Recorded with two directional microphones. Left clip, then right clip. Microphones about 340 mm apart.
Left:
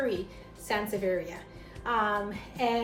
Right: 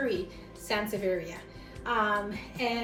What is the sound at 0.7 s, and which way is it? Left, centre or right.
A woman's voice, centre.